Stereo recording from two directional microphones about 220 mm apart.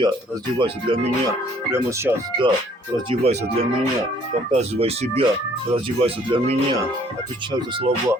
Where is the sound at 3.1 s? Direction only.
25° right (ahead or behind).